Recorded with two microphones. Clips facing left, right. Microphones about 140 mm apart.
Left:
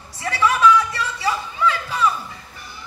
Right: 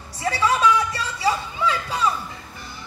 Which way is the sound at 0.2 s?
25° right (ahead or behind).